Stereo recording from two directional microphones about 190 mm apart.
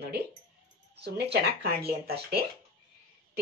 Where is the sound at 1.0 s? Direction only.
60° right (ahead or behind).